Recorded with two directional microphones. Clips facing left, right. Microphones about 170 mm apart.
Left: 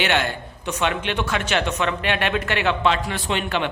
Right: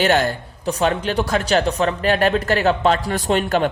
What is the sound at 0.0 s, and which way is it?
Speech, 40° right (ahead or behind).